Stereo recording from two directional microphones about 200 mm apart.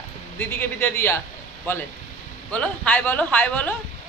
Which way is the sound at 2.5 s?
5° left (ahead or behind).